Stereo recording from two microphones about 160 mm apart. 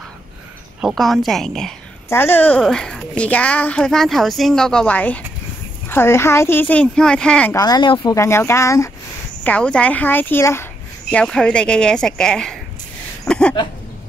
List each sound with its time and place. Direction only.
0.7 s a woman's voice: centre (ahead or behind)
2.0 s speech: 15° left (ahead or behind)
7.5 s speech: 25° left (ahead or behind)
9.4 s a woman's voice: 10° left (ahead or behind)